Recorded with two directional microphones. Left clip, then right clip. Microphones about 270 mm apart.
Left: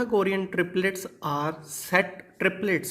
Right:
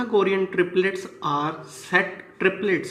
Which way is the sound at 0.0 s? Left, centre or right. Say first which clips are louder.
Right 4 dB; left.